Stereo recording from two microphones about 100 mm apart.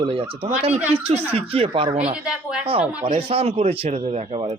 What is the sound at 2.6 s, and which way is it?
Speech, 65° right (ahead or behind).